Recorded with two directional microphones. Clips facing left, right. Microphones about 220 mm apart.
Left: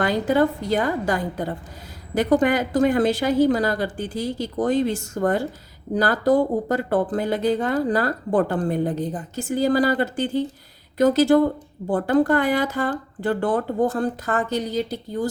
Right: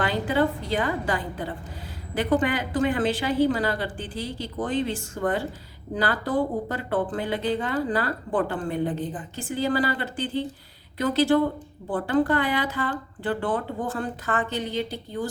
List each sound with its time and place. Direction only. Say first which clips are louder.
0.0 s speech: left 4 dB; 45° left (ahead or behind)